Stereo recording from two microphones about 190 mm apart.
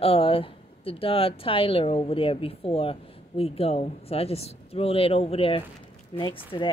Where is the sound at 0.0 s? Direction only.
30° left (ahead or behind).